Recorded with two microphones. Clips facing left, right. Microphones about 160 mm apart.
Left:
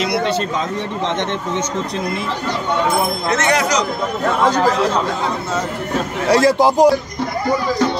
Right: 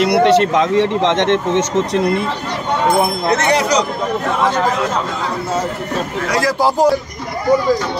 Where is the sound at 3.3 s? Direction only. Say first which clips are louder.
Right 1 dB; 30° right (ahead or behind).